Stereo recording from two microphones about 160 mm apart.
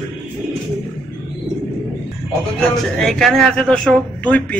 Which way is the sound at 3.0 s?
Centre (ahead or behind).